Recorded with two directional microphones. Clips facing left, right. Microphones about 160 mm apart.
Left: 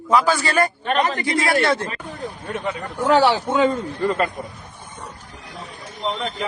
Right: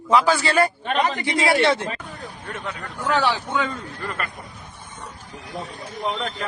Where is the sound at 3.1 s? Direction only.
30° left (ahead or behind).